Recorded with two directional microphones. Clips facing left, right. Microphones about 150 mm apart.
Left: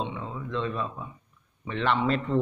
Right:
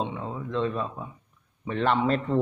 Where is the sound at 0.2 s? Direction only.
40° right (ahead or behind).